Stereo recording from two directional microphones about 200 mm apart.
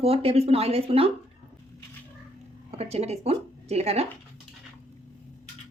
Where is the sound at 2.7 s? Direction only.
30° right (ahead or behind).